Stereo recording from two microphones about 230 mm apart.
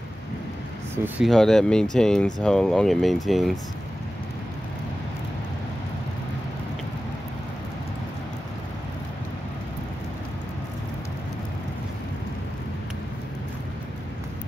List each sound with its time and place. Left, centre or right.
1.0 s speech: centre